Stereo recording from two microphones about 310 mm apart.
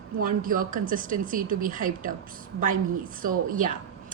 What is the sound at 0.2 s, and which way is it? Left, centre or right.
A woman's voice, right.